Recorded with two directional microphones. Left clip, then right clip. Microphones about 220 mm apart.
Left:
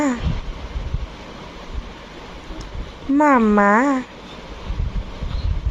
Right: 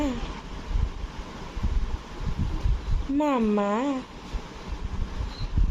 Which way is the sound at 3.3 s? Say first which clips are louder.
Left 10 dB; 20° left (ahead or behind).